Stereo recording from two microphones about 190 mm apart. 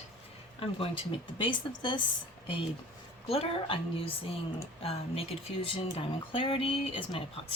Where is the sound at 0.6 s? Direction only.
30° left (ahead or behind).